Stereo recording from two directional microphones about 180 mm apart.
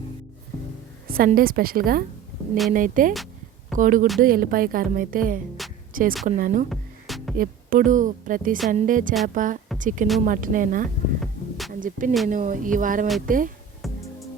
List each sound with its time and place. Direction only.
1.0 s music: 55° right (ahead or behind)
1.4 s speech: 55° right (ahead or behind)
6.7 s music: centre (ahead or behind)
7.3 s speech: 50° right (ahead or behind)
10.8 s music: centre (ahead or behind)
11.7 s speech: 50° right (ahead or behind)
13.8 s music: centre (ahead or behind)